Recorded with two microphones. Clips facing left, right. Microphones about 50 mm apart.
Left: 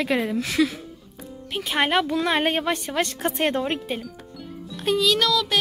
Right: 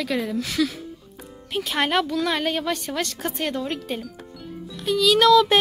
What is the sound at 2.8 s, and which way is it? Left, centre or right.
Speech, centre.